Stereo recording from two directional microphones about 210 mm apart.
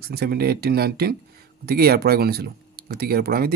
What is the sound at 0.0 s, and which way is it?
Speech, 50° right (ahead or behind).